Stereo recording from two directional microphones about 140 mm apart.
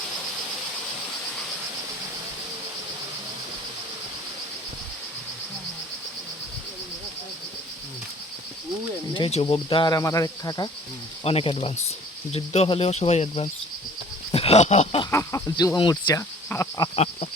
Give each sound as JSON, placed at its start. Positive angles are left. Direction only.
{"t": 9.1, "sound": "speech", "side_deg": 40}
{"t": 11.2, "sound": "speech", "side_deg": 45}
{"t": 15.1, "sound": "speech", "side_deg": 20}
{"t": 16.5, "sound": "a sound", "side_deg": 15}
{"t": 16.9, "sound": "speech", "side_deg": 45}